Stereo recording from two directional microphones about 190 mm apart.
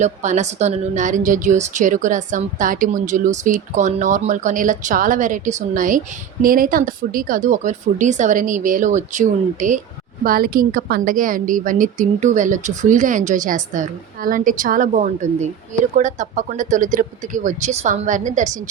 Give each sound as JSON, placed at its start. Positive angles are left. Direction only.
{"t": 0.0, "sound": "a woman's voice", "side_deg": -40}